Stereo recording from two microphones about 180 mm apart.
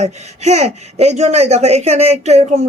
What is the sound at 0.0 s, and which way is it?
A woman's voice, 40° right (ahead or behind).